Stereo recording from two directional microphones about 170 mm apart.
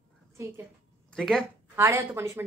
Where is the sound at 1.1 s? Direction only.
5° left (ahead or behind).